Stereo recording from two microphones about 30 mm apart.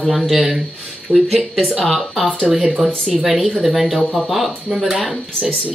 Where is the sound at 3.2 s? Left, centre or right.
Centre.